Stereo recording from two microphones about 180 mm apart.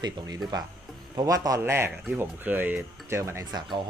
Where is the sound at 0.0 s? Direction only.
20° right (ahead or behind).